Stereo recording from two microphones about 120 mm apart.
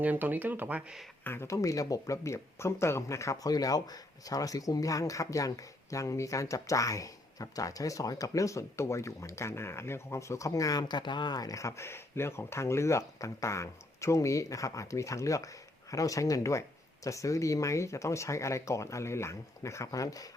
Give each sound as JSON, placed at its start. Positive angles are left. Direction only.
{"t": 0.0, "sound": "speech", "side_deg": -15}
{"t": 1.2, "sound": "speech", "side_deg": 20}